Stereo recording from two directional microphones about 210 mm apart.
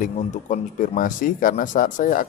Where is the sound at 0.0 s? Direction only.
40° left (ahead or behind).